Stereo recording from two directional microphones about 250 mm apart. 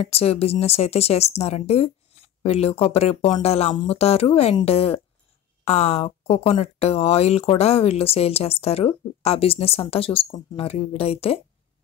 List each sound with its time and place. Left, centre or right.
0.1 s speech: left